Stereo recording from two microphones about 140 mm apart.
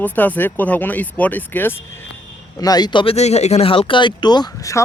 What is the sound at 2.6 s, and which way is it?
Speech, 30° left (ahead or behind).